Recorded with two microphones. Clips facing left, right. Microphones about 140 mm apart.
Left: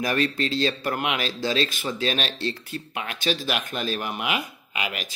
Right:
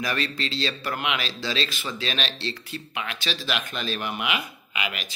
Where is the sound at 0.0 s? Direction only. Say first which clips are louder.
Left 4 dB; 45° left (ahead or behind).